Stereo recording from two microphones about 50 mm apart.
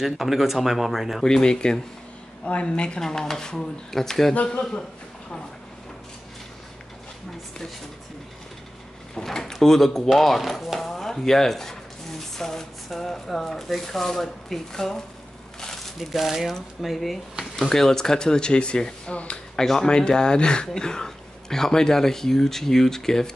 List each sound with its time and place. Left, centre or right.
0.0 s speech: centre
1.2 s a man's voice: centre
9.1 s speech: centre
10.9 s a sound: centre
12.4 s speech: centre